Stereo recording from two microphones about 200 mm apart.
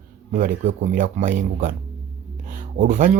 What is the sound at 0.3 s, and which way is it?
Speech, 40° right (ahead or behind).